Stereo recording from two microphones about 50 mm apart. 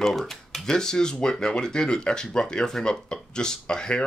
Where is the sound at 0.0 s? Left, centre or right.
Centre.